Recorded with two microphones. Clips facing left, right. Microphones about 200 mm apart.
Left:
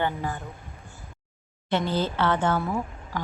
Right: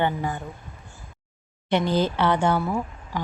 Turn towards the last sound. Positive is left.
turn(degrees=-10)  # may be behind; listen again after turning